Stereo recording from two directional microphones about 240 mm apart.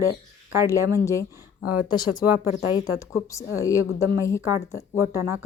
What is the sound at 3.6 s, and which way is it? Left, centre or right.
Speech, centre.